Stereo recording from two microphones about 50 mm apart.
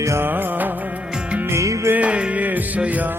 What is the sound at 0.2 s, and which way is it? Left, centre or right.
Music, right.